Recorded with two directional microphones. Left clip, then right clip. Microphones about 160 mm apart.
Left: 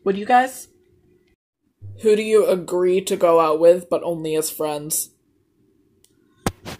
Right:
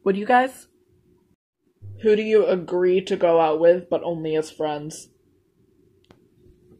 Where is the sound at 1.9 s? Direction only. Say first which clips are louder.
Left 2 dB; 10° left (ahead or behind).